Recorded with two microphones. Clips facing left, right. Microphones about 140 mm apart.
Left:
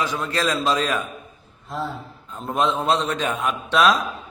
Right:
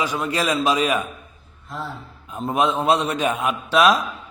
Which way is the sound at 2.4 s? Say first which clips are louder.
Right 2 dB; 10° right (ahead or behind).